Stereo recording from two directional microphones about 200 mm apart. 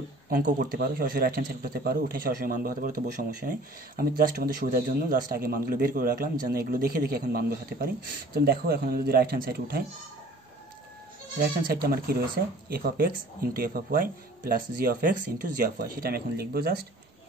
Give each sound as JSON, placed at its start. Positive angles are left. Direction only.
{"t": 0.3, "sound": "speech", "side_deg": -40}
{"t": 11.3, "sound": "speech", "side_deg": -50}